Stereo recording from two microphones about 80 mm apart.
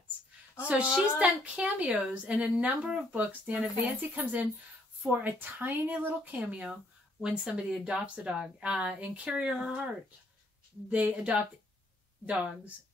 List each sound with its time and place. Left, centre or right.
0.7 s speech: centre
10.9 s speech: centre